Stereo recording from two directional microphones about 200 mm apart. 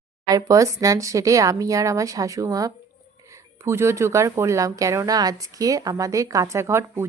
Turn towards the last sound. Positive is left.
turn(degrees=-15)  # may be behind; listen again after turning